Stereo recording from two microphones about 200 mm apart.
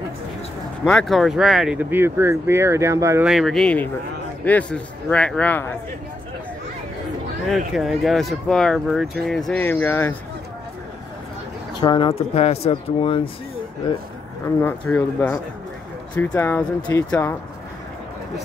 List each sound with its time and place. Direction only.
0.8 s speech: 5° left (ahead or behind); by 3.3 s 15° right (ahead or behind)
3.3 s speech: centre (ahead or behind)
7.4 s speech: centre (ahead or behind)
11.7 s speech: 25° left (ahead or behind)
14.6 s speech: 10° left (ahead or behind)